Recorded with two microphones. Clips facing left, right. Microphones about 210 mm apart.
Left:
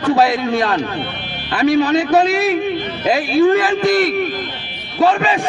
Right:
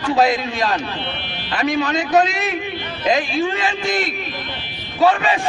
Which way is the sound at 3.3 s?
55° left (ahead or behind).